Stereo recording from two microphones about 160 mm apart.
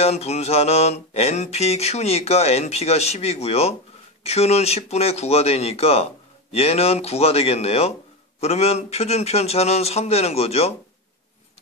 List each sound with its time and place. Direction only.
0.0 s mantra: 45° left (ahead or behind)